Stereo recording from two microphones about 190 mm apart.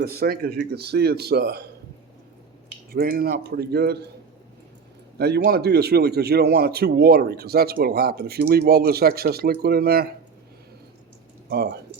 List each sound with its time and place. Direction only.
0.0 s a man's voice: 55° right (ahead or behind)
2.9 s a man's voice: 55° right (ahead or behind)
5.1 s a man's voice: 55° right (ahead or behind)
11.4 s speech: 60° right (ahead or behind)